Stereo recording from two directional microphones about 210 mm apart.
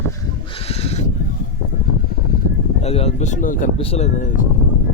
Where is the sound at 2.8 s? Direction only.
30° left (ahead or behind).